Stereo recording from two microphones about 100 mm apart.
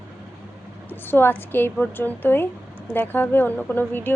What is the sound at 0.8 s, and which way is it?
Speech, 20° left (ahead or behind).